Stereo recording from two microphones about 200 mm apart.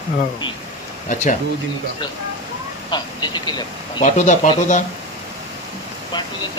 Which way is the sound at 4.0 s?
35° left (ahead or behind).